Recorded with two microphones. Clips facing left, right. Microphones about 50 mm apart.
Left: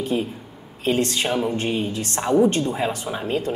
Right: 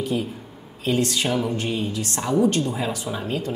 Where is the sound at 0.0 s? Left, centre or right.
Left.